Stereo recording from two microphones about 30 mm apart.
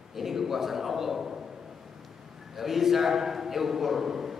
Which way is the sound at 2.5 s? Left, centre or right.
Centre.